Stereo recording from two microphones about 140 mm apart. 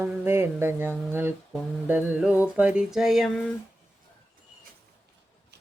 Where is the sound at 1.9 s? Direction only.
10° right (ahead or behind).